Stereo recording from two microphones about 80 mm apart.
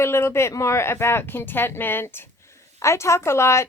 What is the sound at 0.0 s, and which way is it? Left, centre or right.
A woman's voice, left.